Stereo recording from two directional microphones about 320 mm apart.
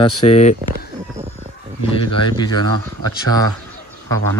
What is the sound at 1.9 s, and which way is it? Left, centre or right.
Speech, centre.